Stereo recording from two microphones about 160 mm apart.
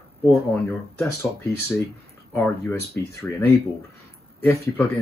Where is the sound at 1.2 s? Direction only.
15° left (ahead or behind).